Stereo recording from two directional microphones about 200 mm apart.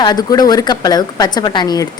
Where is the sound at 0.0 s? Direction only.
20° left (ahead or behind).